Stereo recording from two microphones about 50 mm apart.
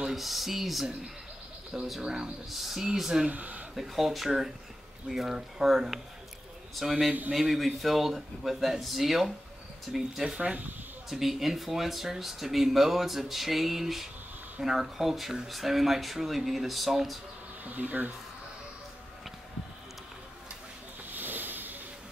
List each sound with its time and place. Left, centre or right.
0.0 s speech: centre
3.3 s speech: right
3.7 s a man's voice: centre
7.1 s speech: right
7.3 s speech: centre; by 10.6 s right
11.1 s speech: centre
17.6 s speech: right
21.1 s a sound: right